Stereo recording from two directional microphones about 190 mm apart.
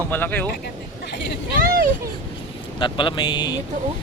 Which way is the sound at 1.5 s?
50° right (ahead or behind).